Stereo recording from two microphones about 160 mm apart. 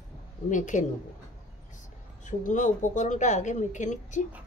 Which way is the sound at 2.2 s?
50° left (ahead or behind).